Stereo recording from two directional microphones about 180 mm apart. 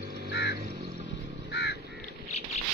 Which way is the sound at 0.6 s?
35° right (ahead or behind).